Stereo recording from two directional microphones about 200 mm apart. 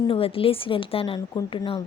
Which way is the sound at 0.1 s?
30° left (ahead or behind).